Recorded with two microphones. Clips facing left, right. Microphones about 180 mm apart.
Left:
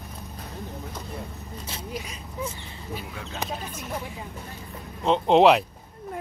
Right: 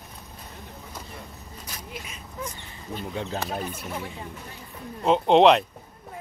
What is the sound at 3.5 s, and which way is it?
Speech, 60° right (ahead or behind).